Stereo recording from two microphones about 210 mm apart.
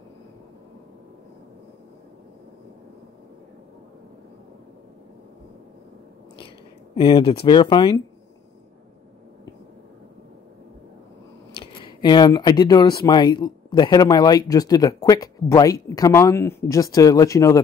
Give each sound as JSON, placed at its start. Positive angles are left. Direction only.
{"t": 7.0, "sound": "speech", "side_deg": 25}
{"t": 11.5, "sound": "speech", "side_deg": 25}